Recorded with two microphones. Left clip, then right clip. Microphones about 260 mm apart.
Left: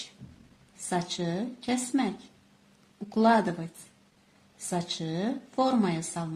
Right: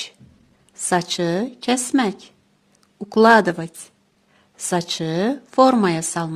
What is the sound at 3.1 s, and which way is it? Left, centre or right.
Speech, right.